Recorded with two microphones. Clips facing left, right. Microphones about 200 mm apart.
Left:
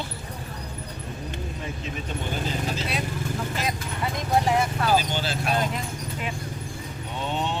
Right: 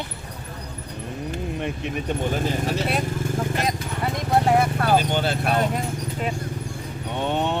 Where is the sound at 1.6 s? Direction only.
65° right (ahead or behind).